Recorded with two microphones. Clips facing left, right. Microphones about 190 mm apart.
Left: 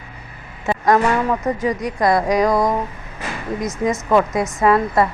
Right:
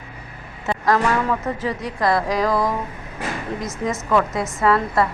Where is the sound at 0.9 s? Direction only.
20° left (ahead or behind).